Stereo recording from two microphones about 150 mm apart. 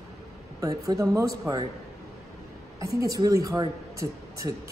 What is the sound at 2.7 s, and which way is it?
A woman's voice, 25° right (ahead or behind).